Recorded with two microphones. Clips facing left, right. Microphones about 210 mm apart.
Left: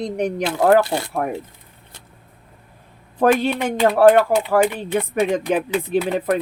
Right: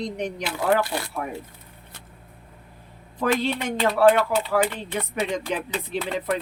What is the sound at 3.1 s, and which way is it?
Speech, 50° left (ahead or behind).